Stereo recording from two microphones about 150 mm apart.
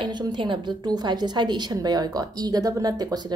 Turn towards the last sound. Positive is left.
turn(degrees=-25)  # may be behind; listen again after turning